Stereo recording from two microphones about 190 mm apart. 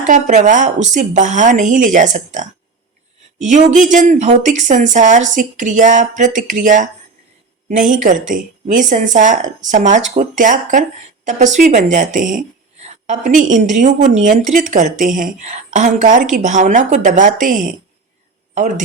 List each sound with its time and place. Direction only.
0.1 s a woman's voice: 40° right (ahead or behind)
7.9 s a woman's voice: 45° right (ahead or behind)